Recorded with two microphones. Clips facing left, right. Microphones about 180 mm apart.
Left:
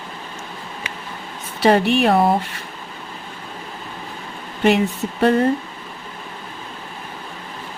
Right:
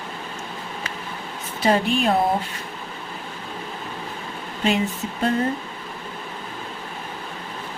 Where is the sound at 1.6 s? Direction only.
70° left (ahead or behind).